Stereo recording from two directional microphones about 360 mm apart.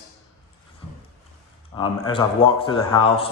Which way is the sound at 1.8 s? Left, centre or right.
Centre.